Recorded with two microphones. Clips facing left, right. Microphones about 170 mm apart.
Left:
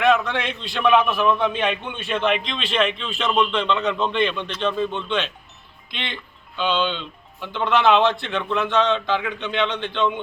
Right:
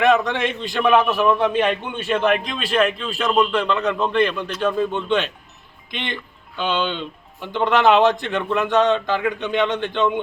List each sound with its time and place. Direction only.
0.0 s a man's voice: 15° right (ahead or behind)